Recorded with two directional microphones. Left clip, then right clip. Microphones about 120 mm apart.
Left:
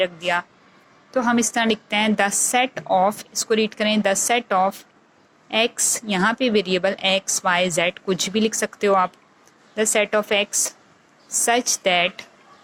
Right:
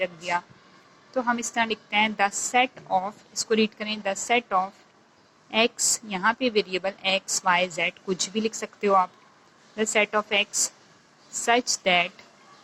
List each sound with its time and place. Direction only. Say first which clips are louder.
0.0 s a woman's voice: left 6 dB; 35° left (ahead or behind)